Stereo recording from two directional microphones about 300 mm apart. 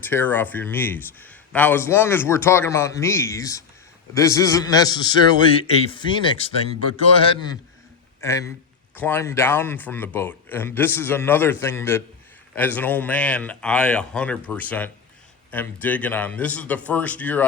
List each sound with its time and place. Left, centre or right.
0.0 s speech: centre